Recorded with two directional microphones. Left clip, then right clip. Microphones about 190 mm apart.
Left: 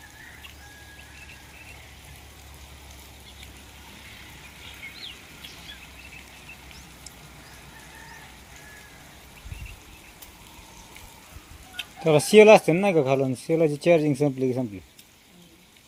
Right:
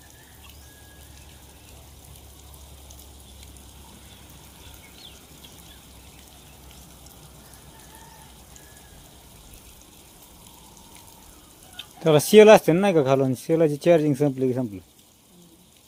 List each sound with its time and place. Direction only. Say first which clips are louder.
12.0 s speech: right 1 dB; 20° right (ahead or behind)